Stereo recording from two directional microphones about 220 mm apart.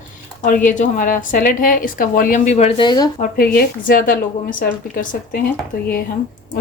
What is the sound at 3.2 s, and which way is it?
Speech, 40° left (ahead or behind).